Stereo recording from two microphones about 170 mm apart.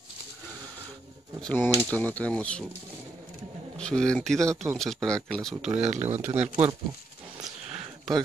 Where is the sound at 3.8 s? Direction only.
5° left (ahead or behind).